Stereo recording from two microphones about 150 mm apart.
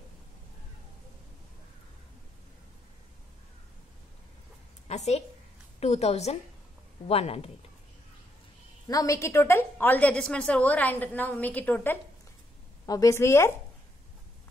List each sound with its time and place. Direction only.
4.8 s a woman's voice: 50° left (ahead or behind)
8.8 s a woman's voice: 20° left (ahead or behind)
12.8 s a woman's voice: 20° left (ahead or behind)